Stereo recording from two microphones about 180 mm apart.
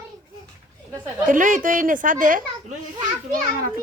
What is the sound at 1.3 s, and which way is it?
A woman's voice, 50° right (ahead or behind).